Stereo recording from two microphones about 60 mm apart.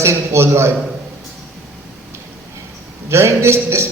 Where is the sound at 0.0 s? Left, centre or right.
Right.